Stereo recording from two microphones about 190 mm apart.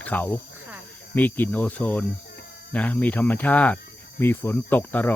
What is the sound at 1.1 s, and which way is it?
Cricket, 10° left (ahead or behind).